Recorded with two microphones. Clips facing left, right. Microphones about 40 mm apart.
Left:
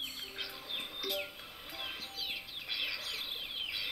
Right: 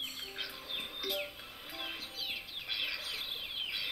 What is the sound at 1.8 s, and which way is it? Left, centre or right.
Bird, centre.